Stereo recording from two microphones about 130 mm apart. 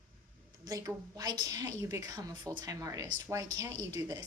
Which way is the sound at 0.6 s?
30° right (ahead or behind).